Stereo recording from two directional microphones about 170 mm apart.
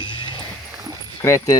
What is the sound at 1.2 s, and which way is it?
Speech, 15° left (ahead or behind).